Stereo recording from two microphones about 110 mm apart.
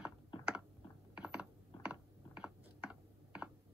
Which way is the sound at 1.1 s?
10° right (ahead or behind).